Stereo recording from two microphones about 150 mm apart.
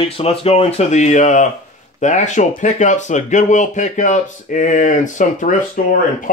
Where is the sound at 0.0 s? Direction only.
40° left (ahead or behind).